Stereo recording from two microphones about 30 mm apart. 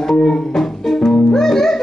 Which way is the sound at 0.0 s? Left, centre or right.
Centre.